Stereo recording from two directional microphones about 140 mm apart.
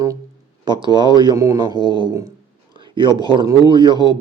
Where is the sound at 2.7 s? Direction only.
35° right (ahead or behind).